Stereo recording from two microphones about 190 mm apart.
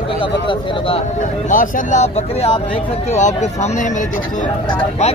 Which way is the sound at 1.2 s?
45° left (ahead or behind).